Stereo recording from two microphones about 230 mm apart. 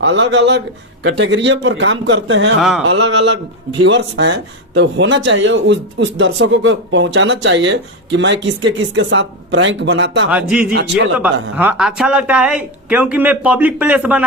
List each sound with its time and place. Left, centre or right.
0.0 s speech: right
2.6 s speech: centre
2.8 s speech: right
10.3 s speech: centre
10.7 s speech: right
11.5 s speech: centre